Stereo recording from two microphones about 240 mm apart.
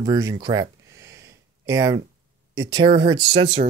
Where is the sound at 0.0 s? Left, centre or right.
Centre.